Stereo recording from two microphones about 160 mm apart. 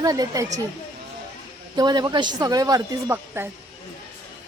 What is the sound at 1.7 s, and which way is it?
Speech, 25° right (ahead or behind).